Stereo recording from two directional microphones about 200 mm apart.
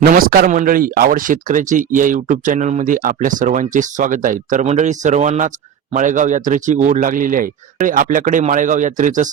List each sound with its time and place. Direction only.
0.0 s speech: 45° right (ahead or behind)